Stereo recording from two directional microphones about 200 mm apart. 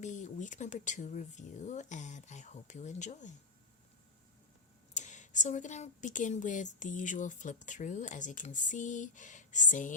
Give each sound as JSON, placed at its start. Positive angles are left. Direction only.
{"t": 0.0, "sound": "speech", "side_deg": 40}
{"t": 4.9, "sound": "speech", "side_deg": 35}